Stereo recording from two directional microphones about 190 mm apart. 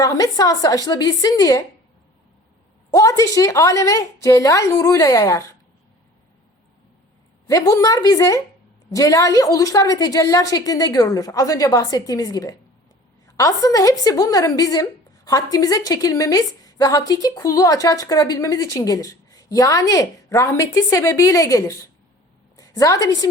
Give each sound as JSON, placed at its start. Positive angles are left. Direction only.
{"t": 0.0, "sound": "a woman's voice", "side_deg": 20}
{"t": 2.9, "sound": "a woman's voice", "side_deg": 15}
{"t": 7.4, "sound": "a woman's voice", "side_deg": 20}